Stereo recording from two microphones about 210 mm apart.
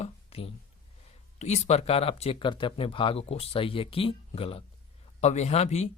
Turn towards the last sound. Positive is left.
turn(degrees=30)  # may be behind; listen again after turning